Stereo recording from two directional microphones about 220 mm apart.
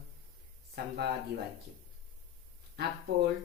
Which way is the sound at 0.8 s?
50° right (ahead or behind).